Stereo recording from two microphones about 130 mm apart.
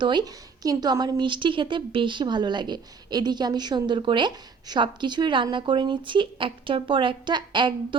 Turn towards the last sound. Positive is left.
turn(degrees=-35)  # may be behind; listen again after turning